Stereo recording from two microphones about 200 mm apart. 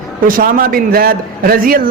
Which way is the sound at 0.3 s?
45° right (ahead or behind).